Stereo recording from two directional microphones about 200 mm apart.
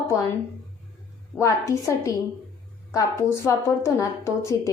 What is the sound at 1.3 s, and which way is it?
A woman's voice, 15° left (ahead or behind).